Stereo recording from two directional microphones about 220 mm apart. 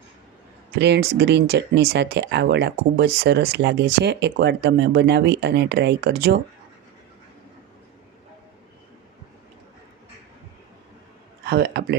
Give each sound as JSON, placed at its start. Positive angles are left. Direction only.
{"t": 0.8, "sound": "speech", "side_deg": -50}
{"t": 11.4, "sound": "speech", "side_deg": -50}